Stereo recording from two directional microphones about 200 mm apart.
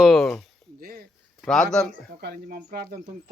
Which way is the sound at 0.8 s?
50° right (ahead or behind).